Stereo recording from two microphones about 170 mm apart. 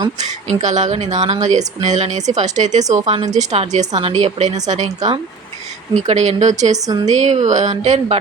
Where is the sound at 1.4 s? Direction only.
45° right (ahead or behind).